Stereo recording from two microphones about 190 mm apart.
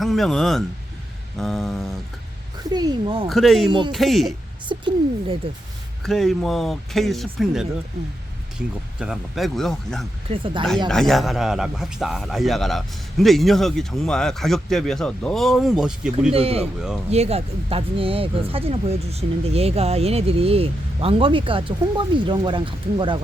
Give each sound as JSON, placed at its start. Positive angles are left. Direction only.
{"t": 0.0, "sound": "a man's voice", "side_deg": 0}
{"t": 2.6, "sound": "speech", "side_deg": -20}
{"t": 3.2, "sound": "a man's voice", "side_deg": 0}
{"t": 3.7, "sound": "speech", "side_deg": -25}
{"t": 3.9, "sound": "a man's voice", "side_deg": 0}
{"t": 4.7, "sound": "speech", "side_deg": -25}
{"t": 6.0, "sound": "a man's voice", "side_deg": 0}
{"t": 10.2, "sound": "speech", "side_deg": -25}
{"t": 10.8, "sound": "a man's voice", "side_deg": 0}
{"t": 16.3, "sound": "speech", "side_deg": -30}